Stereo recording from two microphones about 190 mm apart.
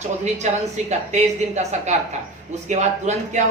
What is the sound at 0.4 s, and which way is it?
Speech, 35° right (ahead or behind).